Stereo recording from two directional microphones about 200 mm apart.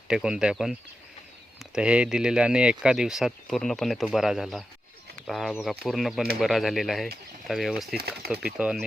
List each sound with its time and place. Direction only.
0.1 s speech: 5° right (ahead or behind)
7.9 s speech: 50° right (ahead or behind)
8.5 s speech: 5° right (ahead or behind)